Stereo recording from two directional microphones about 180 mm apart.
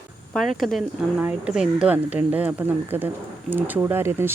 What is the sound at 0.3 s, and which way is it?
Speech, centre (ahead or behind).